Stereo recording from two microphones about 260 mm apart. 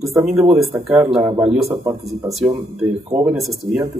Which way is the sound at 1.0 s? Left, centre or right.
Centre.